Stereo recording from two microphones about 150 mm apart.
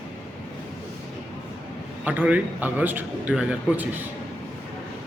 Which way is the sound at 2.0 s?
10° right (ahead or behind).